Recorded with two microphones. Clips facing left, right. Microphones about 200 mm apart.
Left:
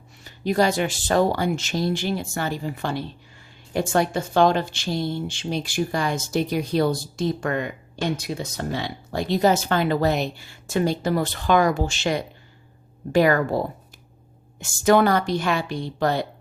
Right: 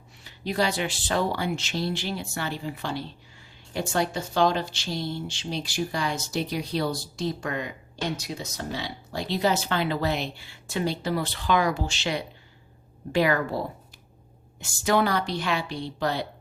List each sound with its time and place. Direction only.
0.3 s speech: 45° left (ahead or behind)
14.6 s speech: 50° left (ahead or behind)